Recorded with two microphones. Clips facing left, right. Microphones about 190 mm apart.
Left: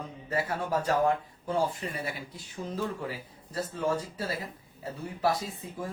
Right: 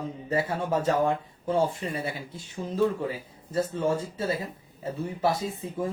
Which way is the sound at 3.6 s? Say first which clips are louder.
Right 4 dB; 25° right (ahead or behind).